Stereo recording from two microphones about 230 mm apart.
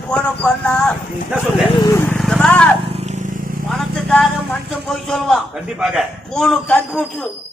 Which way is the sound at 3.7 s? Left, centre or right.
Centre.